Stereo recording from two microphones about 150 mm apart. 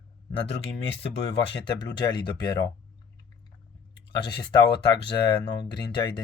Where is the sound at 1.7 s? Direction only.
30° left (ahead or behind).